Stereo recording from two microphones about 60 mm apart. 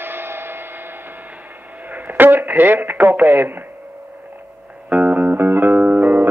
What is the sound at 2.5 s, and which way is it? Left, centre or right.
Speech, right.